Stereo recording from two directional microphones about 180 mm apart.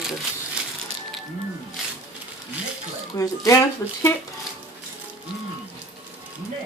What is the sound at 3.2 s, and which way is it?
Speech, 20° left (ahead or behind).